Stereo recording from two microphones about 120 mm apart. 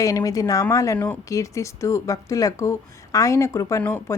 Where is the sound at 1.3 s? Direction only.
25° left (ahead or behind).